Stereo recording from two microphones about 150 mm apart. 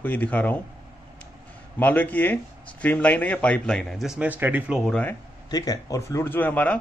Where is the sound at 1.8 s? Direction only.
10° left (ahead or behind); by 4.8 s 10° right (ahead or behind).